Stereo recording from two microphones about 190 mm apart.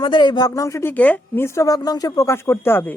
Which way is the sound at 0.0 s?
25° left (ahead or behind).